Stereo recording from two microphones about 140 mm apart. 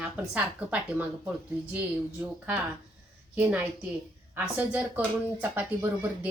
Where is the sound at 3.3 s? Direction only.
15° right (ahead or behind).